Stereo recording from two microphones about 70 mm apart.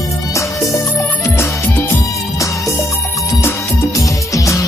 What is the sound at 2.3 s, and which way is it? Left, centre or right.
Music, left.